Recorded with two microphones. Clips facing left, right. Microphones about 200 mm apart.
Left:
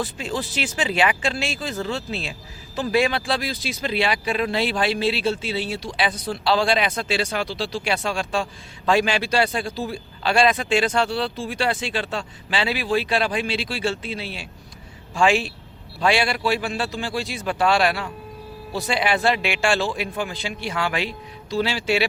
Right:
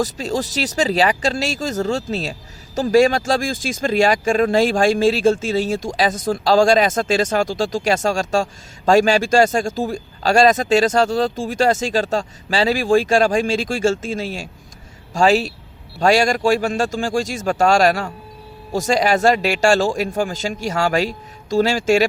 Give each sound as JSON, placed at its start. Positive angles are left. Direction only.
{"t": 0.0, "sound": "speech", "side_deg": -40}